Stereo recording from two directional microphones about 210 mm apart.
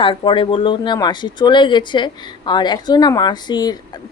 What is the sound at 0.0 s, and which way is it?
Speech, 25° left (ahead or behind).